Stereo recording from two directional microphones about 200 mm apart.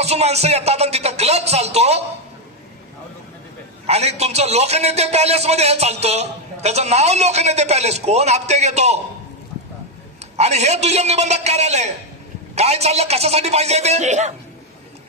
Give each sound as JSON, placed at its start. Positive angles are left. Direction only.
{"t": 0.0, "sound": "a man's voice", "side_deg": -30}
{"t": 3.8, "sound": "a man's voice", "side_deg": -30}
{"t": 10.3, "sound": "a man's voice", "side_deg": -35}